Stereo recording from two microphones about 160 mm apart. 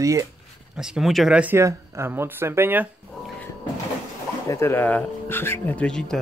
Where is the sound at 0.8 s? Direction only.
5° right (ahead or behind).